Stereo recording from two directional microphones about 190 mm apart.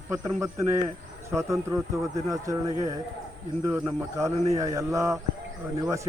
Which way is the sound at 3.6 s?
15° right (ahead or behind).